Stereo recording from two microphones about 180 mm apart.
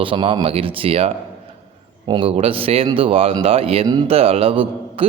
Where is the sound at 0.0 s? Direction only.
30° right (ahead or behind).